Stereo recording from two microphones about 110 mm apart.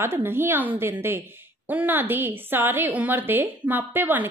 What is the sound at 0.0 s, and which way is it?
A woman's voice, 20° right (ahead or behind).